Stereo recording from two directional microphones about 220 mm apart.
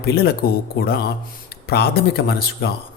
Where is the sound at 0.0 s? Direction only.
45° left (ahead or behind).